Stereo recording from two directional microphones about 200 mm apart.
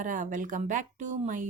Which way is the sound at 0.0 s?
40° right (ahead or behind).